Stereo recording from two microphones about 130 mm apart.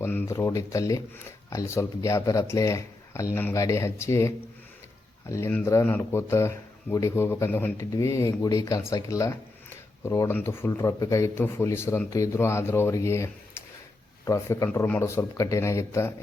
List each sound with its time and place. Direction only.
0.0 s speech: 15° left (ahead or behind)
5.5 s speech: 15° left (ahead or behind)